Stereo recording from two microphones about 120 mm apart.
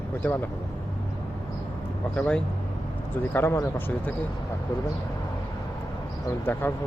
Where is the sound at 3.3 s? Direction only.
20° left (ahead or behind).